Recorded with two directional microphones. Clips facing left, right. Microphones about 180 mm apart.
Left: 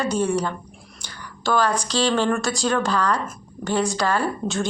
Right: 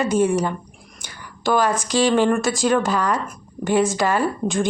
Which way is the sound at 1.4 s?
15° right (ahead or behind).